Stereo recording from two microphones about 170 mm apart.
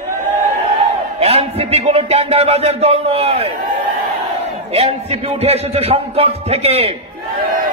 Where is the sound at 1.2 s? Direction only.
35° right (ahead or behind).